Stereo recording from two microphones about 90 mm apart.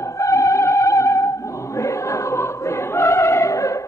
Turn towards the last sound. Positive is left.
turn(degrees=35)  # may be behind; listen again after turning